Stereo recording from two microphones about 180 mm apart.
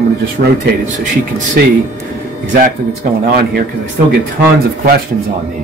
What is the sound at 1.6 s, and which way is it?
Speech, 55° right (ahead or behind).